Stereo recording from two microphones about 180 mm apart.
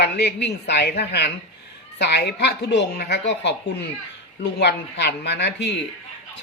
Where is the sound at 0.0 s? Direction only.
70° left (ahead or behind).